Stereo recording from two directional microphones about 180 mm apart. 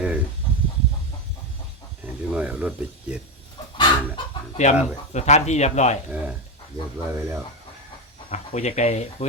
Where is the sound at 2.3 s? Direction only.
5° right (ahead or behind).